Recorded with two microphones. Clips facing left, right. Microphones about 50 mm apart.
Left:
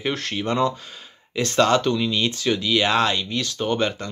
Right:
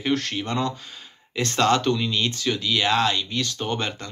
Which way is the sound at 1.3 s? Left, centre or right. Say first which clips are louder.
Left 2 dB; centre.